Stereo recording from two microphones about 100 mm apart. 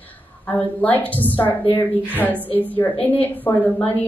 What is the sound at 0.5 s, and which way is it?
Speech, 15° left (ahead or behind).